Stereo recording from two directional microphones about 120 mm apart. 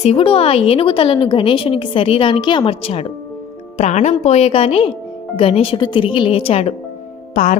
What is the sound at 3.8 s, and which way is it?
A woman's voice, 80° left.